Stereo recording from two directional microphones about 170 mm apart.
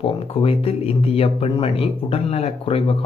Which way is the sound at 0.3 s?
35° left (ahead or behind).